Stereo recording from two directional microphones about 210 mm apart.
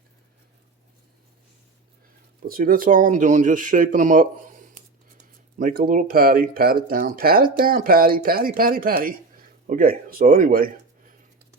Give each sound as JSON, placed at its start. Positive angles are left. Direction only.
{"t": 2.5, "sound": "speech", "side_deg": -45}